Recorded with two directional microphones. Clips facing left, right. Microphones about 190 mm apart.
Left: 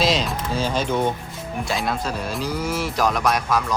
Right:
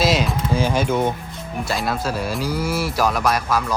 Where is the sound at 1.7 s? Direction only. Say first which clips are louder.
Right 2 dB; centre (ahead or behind).